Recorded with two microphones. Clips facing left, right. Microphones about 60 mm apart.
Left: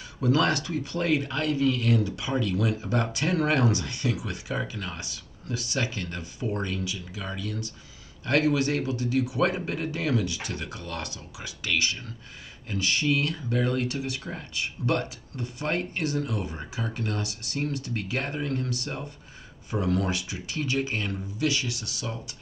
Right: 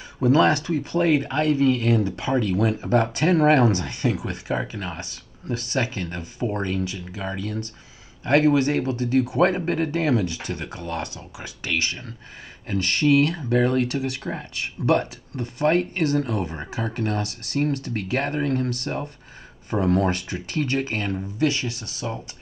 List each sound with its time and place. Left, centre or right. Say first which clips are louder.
0.2 s speech: right 6 dB; right
12.6 s speech: right 5 dB; right
13.1 s speech: right 7 dB; right